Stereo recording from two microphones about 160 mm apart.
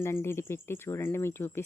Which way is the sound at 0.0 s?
15° left (ahead or behind).